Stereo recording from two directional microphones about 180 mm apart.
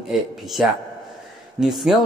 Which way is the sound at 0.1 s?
Centre (ahead or behind).